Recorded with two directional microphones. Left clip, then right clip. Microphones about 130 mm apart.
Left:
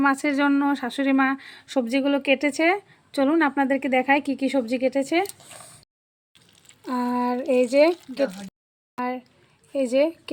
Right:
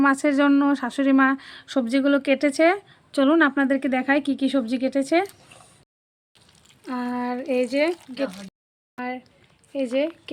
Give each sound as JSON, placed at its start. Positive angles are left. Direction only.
{"t": 0.0, "sound": "speech", "side_deg": -30}
{"t": 6.8, "sound": "speech", "side_deg": 15}
{"t": 8.3, "sound": "speech", "side_deg": 0}
{"t": 9.7, "sound": "speech", "side_deg": 15}